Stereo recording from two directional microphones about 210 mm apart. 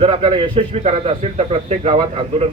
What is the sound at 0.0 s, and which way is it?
A man's voice, 30° right (ahead or behind).